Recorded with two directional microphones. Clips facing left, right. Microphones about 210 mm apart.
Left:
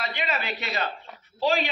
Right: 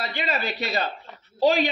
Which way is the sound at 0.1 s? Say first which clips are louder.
Right 2 dB; 35° right (ahead or behind).